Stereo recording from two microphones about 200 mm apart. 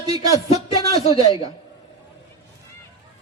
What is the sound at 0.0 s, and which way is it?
A man's voice, 15° right (ahead or behind).